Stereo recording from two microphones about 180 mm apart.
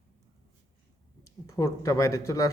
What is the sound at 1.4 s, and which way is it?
Speech, 15° left (ahead or behind).